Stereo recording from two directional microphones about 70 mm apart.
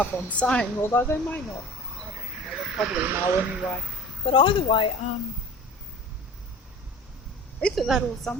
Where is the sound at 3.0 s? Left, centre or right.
Right.